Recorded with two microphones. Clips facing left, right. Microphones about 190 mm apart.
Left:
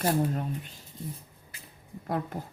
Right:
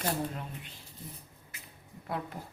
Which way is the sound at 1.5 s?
30° left (ahead or behind).